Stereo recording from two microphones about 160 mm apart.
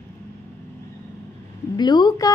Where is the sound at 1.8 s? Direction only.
25° left (ahead or behind).